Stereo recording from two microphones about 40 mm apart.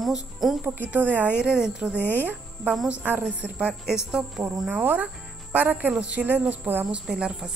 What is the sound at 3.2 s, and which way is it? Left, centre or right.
Speech, right.